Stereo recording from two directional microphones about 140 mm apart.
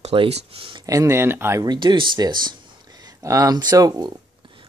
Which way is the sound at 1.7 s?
35° right (ahead or behind).